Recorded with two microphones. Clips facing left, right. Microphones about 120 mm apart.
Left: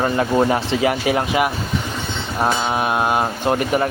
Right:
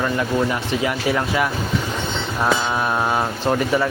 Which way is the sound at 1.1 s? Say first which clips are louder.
Left 2 dB; 20° left (ahead or behind).